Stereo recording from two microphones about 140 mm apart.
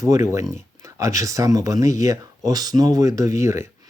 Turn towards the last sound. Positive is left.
turn(degrees=-20)  # may be behind; listen again after turning